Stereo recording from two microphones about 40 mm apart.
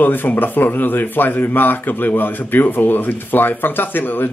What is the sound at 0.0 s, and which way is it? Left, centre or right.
Speech, left.